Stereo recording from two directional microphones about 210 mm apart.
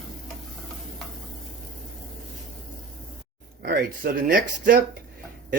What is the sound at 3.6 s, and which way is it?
Speech, 50° right (ahead or behind).